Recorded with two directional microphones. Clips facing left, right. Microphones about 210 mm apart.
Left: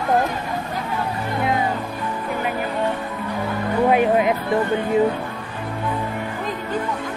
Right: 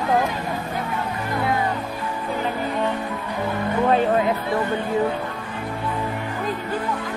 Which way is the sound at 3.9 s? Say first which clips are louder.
Left 2 dB; 15° left (ahead or behind).